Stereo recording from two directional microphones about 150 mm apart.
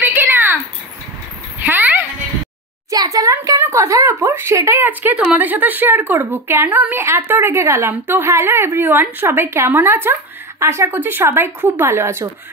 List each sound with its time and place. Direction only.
0.0 s a sound: 15° right (ahead or behind)
1.6 s dog: 10° right (ahead or behind)
2.9 s speech: 25° right (ahead or behind)